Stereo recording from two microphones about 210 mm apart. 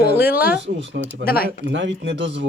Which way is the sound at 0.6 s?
60° right (ahead or behind).